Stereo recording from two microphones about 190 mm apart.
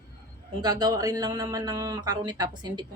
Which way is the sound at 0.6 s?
20° right (ahead or behind).